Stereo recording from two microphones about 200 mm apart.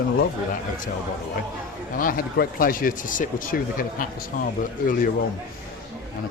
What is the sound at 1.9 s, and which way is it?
Speech, 45° left (ahead or behind).